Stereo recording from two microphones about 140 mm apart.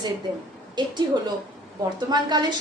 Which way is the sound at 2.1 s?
30° right (ahead or behind).